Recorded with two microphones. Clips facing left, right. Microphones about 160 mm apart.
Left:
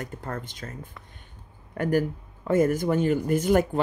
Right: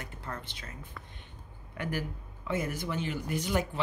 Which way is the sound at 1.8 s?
45° left (ahead or behind).